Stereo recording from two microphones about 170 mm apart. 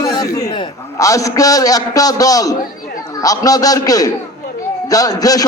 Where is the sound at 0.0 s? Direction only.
20° left (ahead or behind).